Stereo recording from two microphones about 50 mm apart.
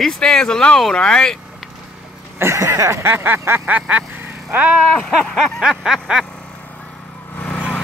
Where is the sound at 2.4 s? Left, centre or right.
Right.